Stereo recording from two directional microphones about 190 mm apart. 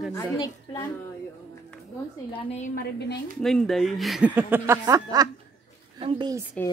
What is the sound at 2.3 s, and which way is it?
Speech, 35° left (ahead or behind).